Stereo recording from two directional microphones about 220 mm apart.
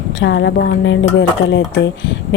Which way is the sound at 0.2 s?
55° left (ahead or behind).